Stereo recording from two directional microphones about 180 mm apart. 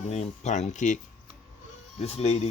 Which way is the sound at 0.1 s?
40° left (ahead or behind).